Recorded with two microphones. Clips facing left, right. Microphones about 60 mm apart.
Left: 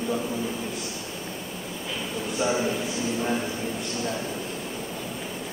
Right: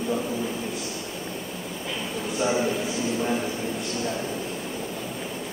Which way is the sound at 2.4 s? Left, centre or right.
Centre.